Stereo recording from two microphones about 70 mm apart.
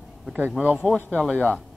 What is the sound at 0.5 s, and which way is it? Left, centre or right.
Speech, centre.